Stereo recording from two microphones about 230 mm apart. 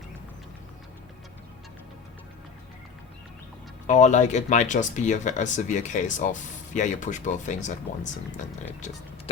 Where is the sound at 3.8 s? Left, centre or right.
Left.